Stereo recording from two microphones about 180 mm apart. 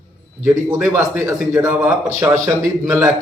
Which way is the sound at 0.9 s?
15° right (ahead or behind).